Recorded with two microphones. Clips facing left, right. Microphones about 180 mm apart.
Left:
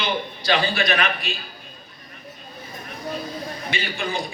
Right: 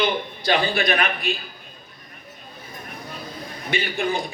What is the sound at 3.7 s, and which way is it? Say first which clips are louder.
Speech: right 6 dB; 55° right (ahead or behind).